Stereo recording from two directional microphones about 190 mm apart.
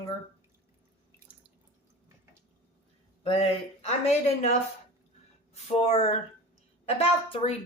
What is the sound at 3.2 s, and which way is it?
Speech, 30° left (ahead or behind).